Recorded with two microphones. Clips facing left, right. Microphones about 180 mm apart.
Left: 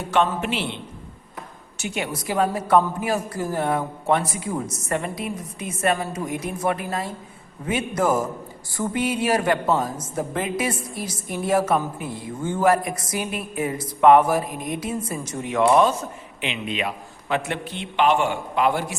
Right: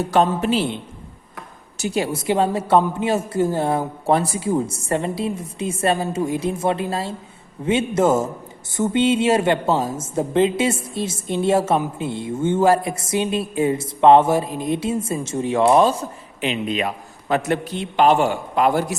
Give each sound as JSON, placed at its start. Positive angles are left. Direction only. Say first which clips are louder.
{"t": 0.0, "sound": "a man's voice", "louder": "right 4 dB", "side_deg": -35}
{"t": 1.8, "sound": "speech", "louder": "right 6 dB", "side_deg": -35}